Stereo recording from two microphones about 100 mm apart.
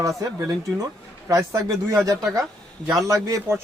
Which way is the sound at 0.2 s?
35° right (ahead or behind).